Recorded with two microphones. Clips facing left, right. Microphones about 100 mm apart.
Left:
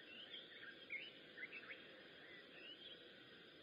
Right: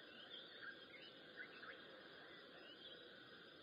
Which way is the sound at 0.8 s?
25° right (ahead or behind).